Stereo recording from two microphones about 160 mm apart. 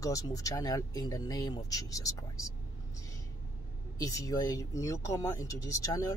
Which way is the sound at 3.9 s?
20° left (ahead or behind).